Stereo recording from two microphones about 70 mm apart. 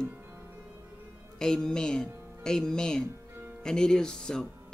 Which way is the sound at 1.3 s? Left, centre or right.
Centre.